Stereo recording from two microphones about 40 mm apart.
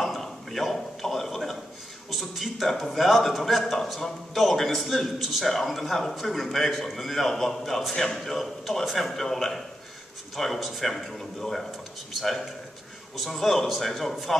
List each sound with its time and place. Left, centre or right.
0.0 s a sound: centre
2.0 s a man's voice: centre
11.1 s a man's voice: centre